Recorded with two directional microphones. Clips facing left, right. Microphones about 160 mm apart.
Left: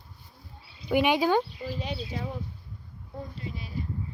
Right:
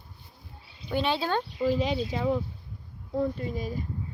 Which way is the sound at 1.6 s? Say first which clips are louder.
Right 8 dB; 90° right.